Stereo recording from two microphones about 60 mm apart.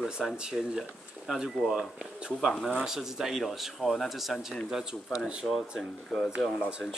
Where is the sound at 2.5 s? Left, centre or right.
Centre.